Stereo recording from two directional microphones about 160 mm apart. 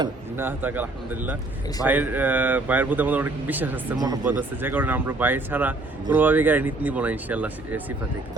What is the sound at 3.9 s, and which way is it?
Speech, 25° right (ahead or behind).